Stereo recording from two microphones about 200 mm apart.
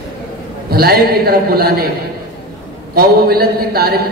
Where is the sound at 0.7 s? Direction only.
50° right (ahead or behind).